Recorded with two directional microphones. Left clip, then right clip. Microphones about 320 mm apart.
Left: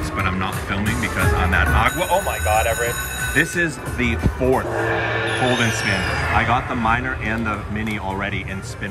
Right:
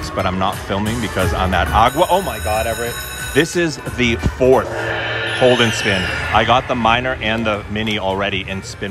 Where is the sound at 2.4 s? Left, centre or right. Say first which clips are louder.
Even; right.